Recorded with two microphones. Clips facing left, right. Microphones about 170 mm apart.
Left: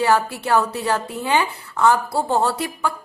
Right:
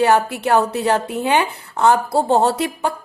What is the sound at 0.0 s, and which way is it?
A woman's voice, 20° right (ahead or behind).